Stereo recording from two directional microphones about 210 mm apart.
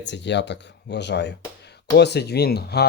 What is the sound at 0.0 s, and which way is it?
Speech, 55° left (ahead or behind).